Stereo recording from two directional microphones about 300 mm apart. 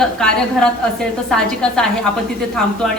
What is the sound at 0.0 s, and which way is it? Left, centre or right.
A woman's voice, centre.